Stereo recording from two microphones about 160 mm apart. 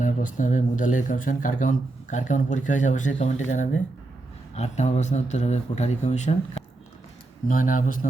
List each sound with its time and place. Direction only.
0.0 s speech: 55° left (ahead or behind)
4.5 s speech: 45° left (ahead or behind)